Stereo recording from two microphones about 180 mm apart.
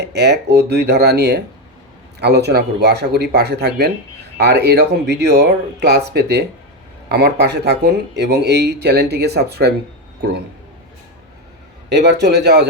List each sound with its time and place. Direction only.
0.1 s speech: 70° right (ahead or behind)
11.9 s speech: 70° right (ahead or behind)